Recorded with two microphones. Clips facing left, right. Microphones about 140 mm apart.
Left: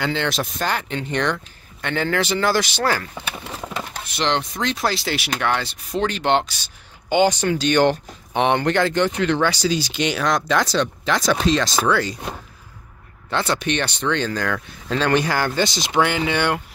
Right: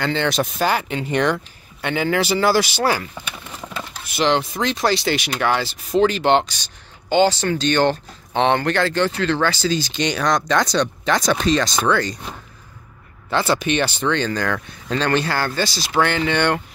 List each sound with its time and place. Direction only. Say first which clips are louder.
0.0 s speech: right 2 dB; centre (ahead or behind)
4.1 s speech: right 4 dB; 5° right (ahead or behind)
7.1 s speech: right 1 dB; 15° left (ahead or behind)
13.3 s speech: right 3 dB; 5° right (ahead or behind)